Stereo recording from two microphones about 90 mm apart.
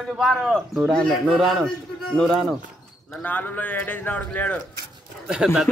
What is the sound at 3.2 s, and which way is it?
Speech, 20° left (ahead or behind).